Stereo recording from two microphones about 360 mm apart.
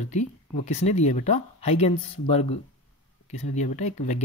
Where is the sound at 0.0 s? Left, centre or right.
Centre.